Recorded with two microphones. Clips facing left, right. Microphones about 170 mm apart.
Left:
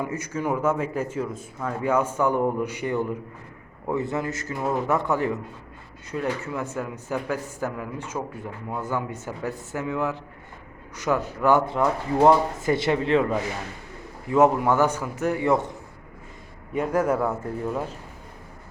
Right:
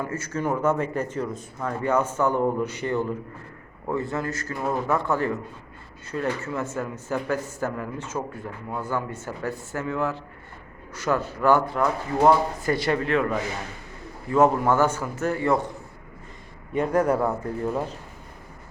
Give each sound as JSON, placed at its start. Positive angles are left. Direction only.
{"t": 0.0, "sound": "a man's voice", "side_deg": 15}
{"t": 16.7, "sound": "a man's voice", "side_deg": 5}